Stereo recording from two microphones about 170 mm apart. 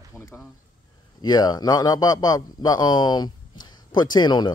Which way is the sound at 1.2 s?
25° left (ahead or behind).